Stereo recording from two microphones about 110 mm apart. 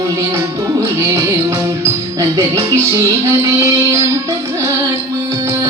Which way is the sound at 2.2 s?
30° right (ahead or behind).